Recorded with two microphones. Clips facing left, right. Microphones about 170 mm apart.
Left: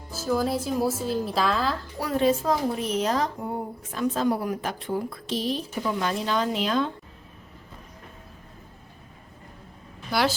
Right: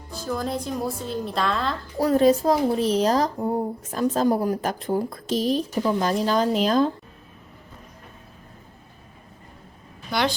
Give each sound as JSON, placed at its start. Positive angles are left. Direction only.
{"t": 0.1, "sound": "speech", "side_deg": 5}
{"t": 2.0, "sound": "speech", "side_deg": -40}
{"t": 10.1, "sound": "a woman's voice", "side_deg": 5}